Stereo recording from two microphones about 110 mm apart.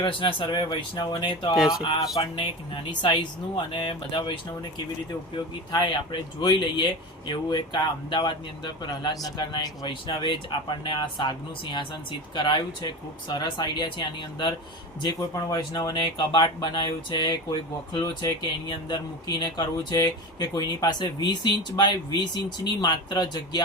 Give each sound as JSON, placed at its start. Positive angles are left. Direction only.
{"t": 0.0, "sound": "speech", "side_deg": 50}
{"t": 3.0, "sound": "speech", "side_deg": 45}
{"t": 5.7, "sound": "speech", "side_deg": 45}